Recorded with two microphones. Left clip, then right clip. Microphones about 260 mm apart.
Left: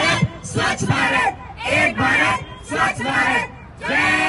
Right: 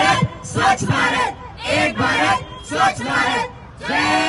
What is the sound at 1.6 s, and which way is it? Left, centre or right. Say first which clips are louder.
Speech: left 1 dB; centre.